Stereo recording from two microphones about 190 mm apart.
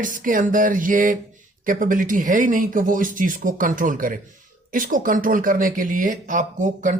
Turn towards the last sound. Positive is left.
turn(degrees=-40)  # may be behind; listen again after turning